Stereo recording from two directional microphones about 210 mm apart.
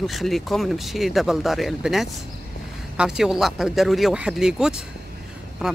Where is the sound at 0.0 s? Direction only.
Centre (ahead or behind).